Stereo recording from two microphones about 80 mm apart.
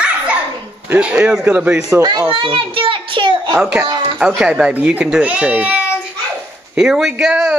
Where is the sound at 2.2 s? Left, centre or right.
Right.